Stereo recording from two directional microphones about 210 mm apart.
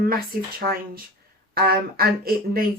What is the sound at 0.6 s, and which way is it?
Speech, 45° right (ahead or behind).